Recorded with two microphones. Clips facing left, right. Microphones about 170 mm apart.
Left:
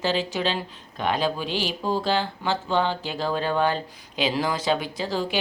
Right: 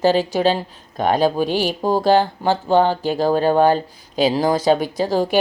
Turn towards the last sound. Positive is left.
turn(degrees=-45)  # may be behind; listen again after turning